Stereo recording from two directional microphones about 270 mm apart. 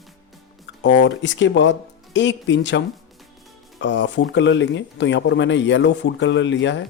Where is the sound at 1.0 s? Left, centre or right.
Left.